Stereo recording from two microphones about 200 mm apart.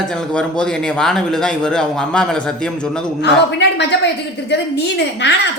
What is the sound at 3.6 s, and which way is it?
A woman's voice, 60° left (ahead or behind).